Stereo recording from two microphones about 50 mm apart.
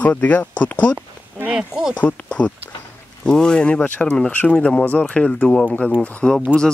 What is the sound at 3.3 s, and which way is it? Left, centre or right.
Speech, centre.